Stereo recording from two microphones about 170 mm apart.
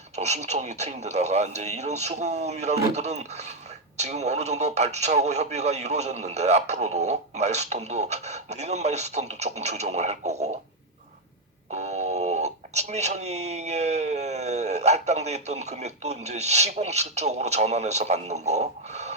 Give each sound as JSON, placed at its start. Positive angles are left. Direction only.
{"t": 0.2, "sound": "speech", "side_deg": -40}
{"t": 11.7, "sound": "speech", "side_deg": -40}